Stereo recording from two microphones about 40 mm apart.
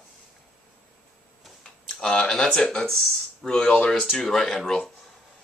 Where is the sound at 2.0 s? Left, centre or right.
Centre.